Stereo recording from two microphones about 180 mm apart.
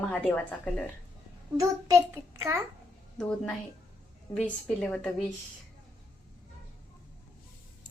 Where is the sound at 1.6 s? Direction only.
15° right (ahead or behind).